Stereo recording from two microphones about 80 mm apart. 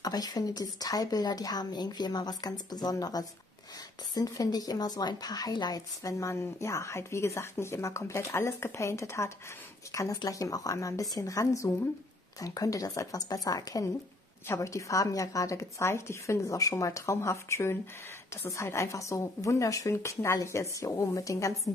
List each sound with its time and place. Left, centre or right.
0.0 s a woman's voice: left
6.1 s a woman's voice: left
10.2 s a woman's voice: left
14.5 s a woman's voice: left